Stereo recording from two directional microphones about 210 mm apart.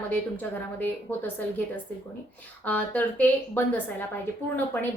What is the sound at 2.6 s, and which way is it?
A woman's voice, 5° left (ahead or behind).